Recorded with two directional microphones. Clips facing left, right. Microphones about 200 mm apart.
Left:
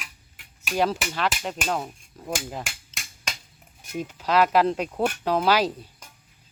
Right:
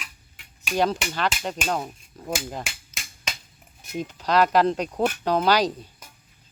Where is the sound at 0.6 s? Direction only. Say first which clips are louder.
Right 1 dB; 5° left (ahead or behind).